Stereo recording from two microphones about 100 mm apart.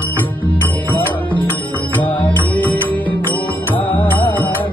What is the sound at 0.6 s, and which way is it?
Music, 15° left (ahead or behind).